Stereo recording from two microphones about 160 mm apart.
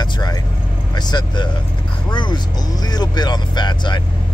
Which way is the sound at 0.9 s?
25° left (ahead or behind).